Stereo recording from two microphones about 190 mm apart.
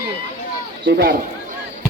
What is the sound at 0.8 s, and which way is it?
Speech, 55° right (ahead or behind).